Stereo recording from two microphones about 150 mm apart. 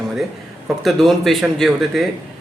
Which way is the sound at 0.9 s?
Centre (ahead or behind).